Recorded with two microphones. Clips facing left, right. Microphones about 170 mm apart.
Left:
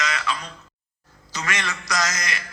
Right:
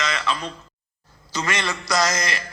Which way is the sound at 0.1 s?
30° right (ahead or behind).